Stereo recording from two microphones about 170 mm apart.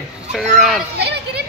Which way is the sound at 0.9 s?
75° right (ahead or behind).